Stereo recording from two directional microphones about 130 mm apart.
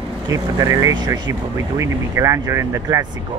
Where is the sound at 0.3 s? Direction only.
25° right (ahead or behind).